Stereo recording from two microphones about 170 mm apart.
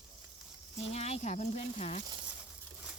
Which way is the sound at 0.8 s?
40° left (ahead or behind).